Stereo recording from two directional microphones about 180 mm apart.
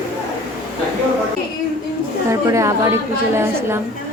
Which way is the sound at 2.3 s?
15° right (ahead or behind).